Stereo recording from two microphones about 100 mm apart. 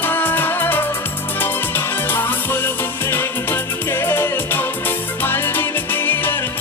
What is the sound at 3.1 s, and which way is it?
Music, 25° left (ahead or behind).